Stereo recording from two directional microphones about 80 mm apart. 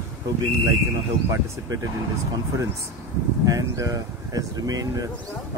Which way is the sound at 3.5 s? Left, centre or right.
Right.